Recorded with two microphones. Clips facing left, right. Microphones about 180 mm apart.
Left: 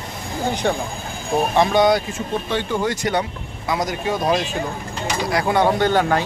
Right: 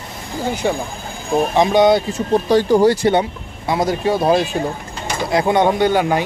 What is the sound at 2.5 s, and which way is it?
Speech, 35° right (ahead or behind).